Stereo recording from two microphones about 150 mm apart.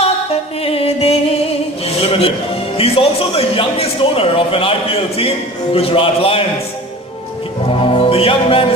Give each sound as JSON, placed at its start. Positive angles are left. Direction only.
{"t": 0.7, "sound": "music", "side_deg": 40}
{"t": 2.0, "sound": "a man's voice", "side_deg": 40}
{"t": 7.7, "sound": "speech", "side_deg": 35}